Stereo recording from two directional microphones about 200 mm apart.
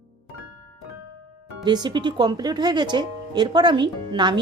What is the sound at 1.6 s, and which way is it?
Speech, 20° right (ahead or behind).